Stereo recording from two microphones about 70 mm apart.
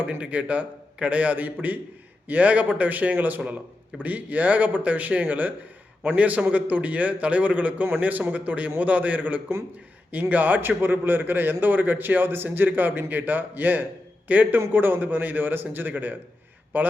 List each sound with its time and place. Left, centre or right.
0.0 s a man's voice: centre